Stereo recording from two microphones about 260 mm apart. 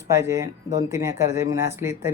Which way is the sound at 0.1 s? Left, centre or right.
Centre.